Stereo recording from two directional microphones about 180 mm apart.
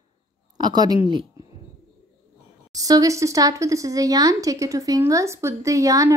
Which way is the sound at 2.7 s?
20° right (ahead or behind).